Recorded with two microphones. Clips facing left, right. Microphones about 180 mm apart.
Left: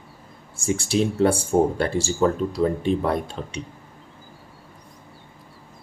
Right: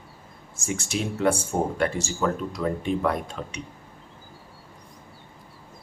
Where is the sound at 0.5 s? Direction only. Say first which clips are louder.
Left 7 dB; 30° left (ahead or behind).